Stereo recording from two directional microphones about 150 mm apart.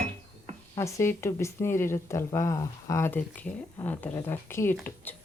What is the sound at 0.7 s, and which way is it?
Speech, 20° left (ahead or behind).